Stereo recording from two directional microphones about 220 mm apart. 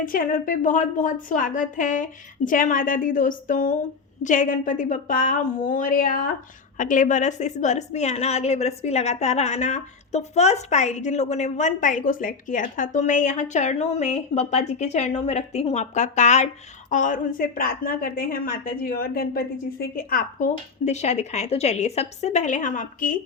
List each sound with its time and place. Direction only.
0.0 s a woman's voice: 40° left (ahead or behind)